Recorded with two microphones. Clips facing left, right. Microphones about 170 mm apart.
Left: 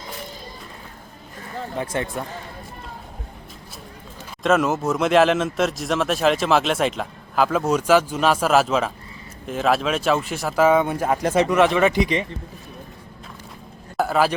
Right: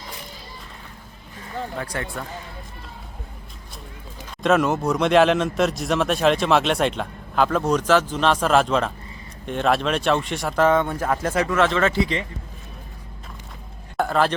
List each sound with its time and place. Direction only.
1.7 s speech: 20° left (ahead or behind)
4.4 s speech: centre (ahead or behind); by 12.2 s 15° left (ahead or behind)
13.9 s a sound: 5° left (ahead or behind)